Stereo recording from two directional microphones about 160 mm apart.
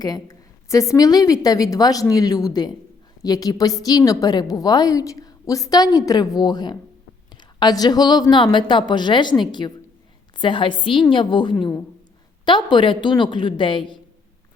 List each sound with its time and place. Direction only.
0.0 s a woman's voice: 25° left (ahead or behind)